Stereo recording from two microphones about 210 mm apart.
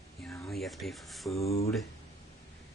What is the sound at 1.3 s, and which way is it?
Speech, 30° left (ahead or behind).